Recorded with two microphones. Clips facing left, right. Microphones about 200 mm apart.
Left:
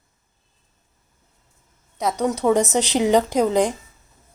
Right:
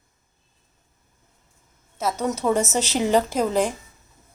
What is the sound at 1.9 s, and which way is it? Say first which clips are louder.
A woman's voice: left 3 dB; 15° left (ahead or behind).